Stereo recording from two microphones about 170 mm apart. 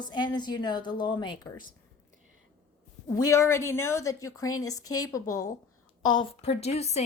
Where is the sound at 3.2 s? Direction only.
15° left (ahead or behind).